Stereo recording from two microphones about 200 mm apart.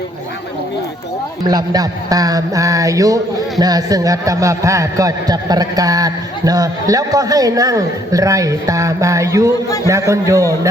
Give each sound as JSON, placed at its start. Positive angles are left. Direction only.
{"t": 1.5, "sound": "a man's voice", "side_deg": -20}